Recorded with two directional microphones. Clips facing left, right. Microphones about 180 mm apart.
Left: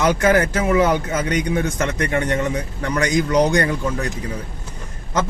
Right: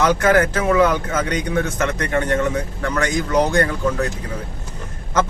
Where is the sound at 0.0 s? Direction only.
10° left (ahead or behind).